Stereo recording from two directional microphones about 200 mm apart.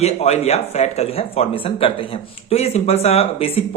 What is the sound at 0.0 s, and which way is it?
Speech, 30° left (ahead or behind).